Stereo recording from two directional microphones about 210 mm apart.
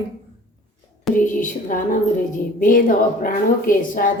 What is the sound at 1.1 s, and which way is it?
A woman's voice, 40° left (ahead or behind).